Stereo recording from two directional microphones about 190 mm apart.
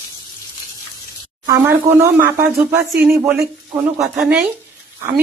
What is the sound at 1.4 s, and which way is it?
Speech, 15° right (ahead or behind).